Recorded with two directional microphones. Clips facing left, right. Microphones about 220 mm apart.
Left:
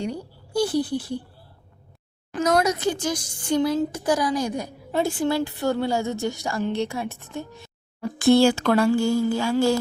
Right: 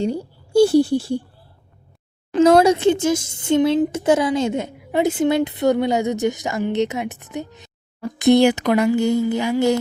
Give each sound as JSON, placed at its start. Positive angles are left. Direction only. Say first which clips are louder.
{"t": 0.0, "sound": "speech", "louder": "right 7 dB", "side_deg": -25}
{"t": 2.3, "sound": "a child's voice", "louder": "right 9 dB", "side_deg": -25}